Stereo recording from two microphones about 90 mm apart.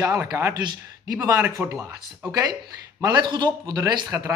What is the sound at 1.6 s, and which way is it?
Speech, 25° right (ahead or behind).